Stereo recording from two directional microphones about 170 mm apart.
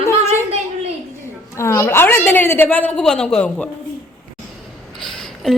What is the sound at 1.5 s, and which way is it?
A woman's voice, 15° left (ahead or behind).